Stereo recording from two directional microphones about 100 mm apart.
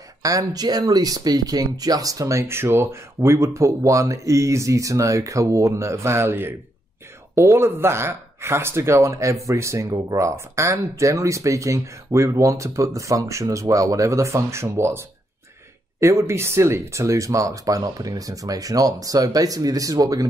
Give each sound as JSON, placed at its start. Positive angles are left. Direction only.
{"t": 0.2, "sound": "speech", "side_deg": -35}